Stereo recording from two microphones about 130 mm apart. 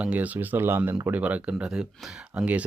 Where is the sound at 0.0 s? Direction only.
10° right (ahead or behind).